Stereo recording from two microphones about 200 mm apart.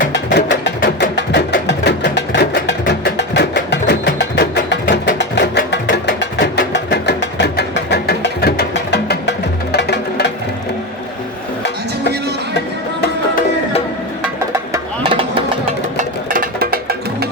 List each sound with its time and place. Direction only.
0.3 s music: 60° left (ahead or behind)
14.7 s music: 25° right (ahead or behind)
16.0 s music: 45° right (ahead or behind)